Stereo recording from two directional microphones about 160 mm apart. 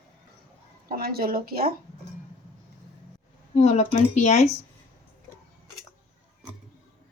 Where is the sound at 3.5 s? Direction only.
45° left (ahead or behind).